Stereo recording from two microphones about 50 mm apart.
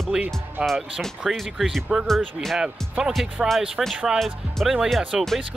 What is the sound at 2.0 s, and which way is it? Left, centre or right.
Speech, centre.